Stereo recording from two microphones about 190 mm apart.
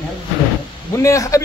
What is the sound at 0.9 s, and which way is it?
Speech, 15° left (ahead or behind).